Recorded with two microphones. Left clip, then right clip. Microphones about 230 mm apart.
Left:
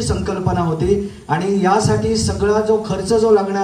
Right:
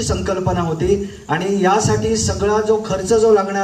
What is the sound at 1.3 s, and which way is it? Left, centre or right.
A man's voice, left.